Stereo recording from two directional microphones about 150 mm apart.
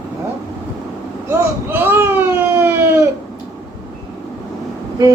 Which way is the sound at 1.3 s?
15° right (ahead or behind).